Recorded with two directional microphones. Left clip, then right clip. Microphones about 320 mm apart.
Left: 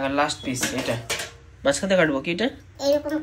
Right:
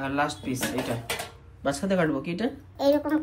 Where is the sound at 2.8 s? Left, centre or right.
Right.